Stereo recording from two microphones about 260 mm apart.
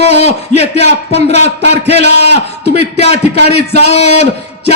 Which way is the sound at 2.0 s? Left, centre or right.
Right.